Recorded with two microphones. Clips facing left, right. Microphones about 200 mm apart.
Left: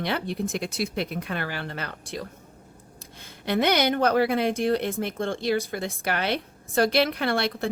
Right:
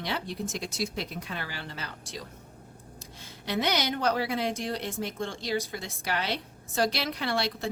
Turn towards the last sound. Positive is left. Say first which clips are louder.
# left 4 dB
turn(degrees=55)  # may be behind; listen again after turning